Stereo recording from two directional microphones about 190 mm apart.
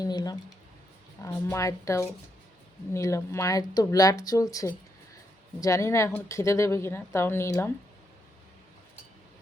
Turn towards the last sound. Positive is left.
turn(degrees=15)  # may be behind; listen again after turning